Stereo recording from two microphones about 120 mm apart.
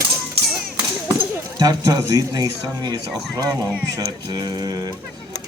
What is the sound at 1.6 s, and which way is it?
Speech, 30° right (ahead or behind).